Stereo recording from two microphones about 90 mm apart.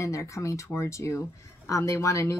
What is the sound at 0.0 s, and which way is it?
Speech, 35° left (ahead or behind).